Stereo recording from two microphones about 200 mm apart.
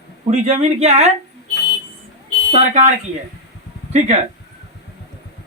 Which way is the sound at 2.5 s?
35° right (ahead or behind).